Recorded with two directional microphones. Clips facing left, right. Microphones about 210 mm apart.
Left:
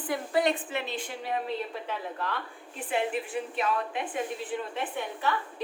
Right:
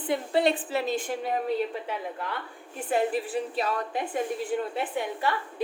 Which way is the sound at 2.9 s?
40° right (ahead or behind).